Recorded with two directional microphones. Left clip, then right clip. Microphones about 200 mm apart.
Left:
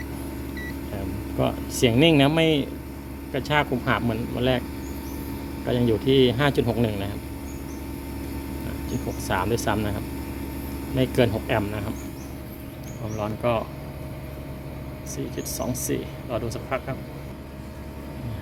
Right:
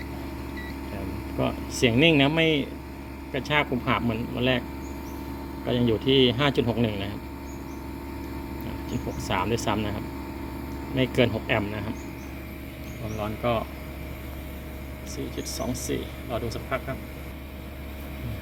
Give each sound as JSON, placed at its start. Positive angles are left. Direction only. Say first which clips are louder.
{"t": 1.4, "sound": "speech", "louder": "left 2 dB", "side_deg": 5}
{"t": 5.6, "sound": "speech", "louder": "left 2 dB", "side_deg": 0}
{"t": 8.9, "sound": "speech", "louder": "left 2 dB", "side_deg": 0}
{"t": 13.1, "sound": "speech", "louder": "left 2 dB", "side_deg": -5}
{"t": 15.4, "sound": "speech", "louder": "left 2 dB", "side_deg": 0}